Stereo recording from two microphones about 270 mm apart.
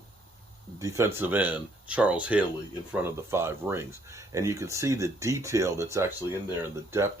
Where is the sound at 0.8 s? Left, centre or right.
Centre.